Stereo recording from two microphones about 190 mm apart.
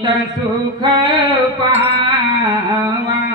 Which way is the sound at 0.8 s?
20° right (ahead or behind).